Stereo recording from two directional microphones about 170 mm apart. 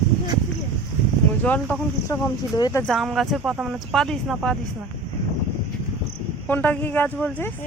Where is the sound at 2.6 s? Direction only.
25° left (ahead or behind).